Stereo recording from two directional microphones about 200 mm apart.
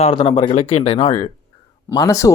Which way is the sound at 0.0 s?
30° left (ahead or behind).